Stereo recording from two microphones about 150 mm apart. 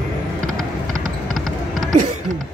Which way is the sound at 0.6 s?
60° right (ahead or behind).